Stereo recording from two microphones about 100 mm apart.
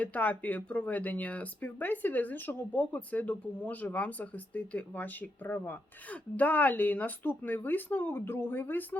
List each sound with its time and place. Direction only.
0.0 s speech: 15° left (ahead or behind)